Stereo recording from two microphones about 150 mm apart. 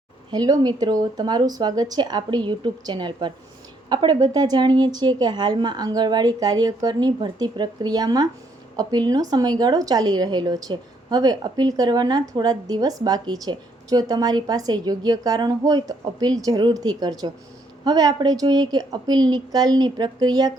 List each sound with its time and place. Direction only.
0.3 s a woman's voice: 25° right (ahead or behind)